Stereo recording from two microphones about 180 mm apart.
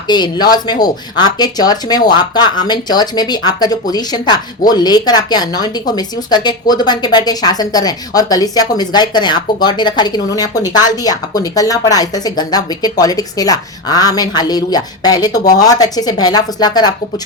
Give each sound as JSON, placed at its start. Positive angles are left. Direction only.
{"t": 0.1, "sound": "speech", "side_deg": 25}